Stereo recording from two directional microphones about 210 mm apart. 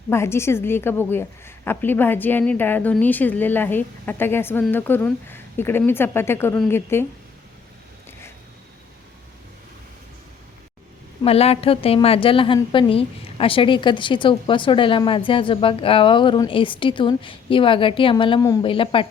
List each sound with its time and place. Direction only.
0.1 s a woman's voice: 10° left (ahead or behind)
11.2 s a woman's voice: 30° left (ahead or behind)